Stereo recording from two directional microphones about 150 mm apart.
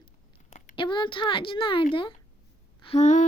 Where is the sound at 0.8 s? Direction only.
30° left (ahead or behind).